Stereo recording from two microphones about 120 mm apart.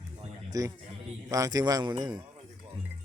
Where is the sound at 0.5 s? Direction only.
30° right (ahead or behind).